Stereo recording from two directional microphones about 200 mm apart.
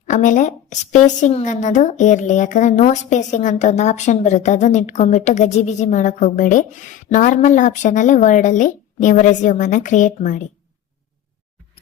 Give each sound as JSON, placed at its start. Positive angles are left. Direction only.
{"t": 0.1, "sound": "a woman's voice", "side_deg": 40}